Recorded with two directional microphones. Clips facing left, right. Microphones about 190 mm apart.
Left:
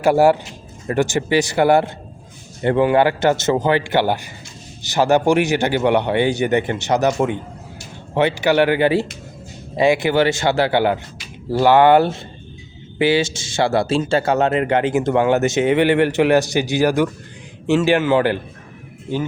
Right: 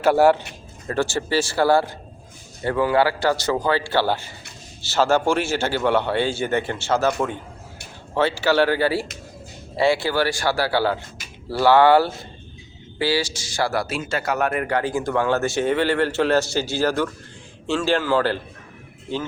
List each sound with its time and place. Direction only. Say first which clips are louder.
0.0 s a man's voice: left 2 dB; 10° left (ahead or behind)